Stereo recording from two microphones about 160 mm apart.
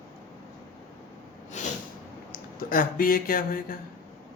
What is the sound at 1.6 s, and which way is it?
Snort, 50° left (ahead or behind).